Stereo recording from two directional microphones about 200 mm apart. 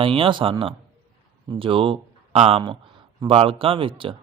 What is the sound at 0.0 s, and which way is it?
A man's voice, 25° right (ahead or behind).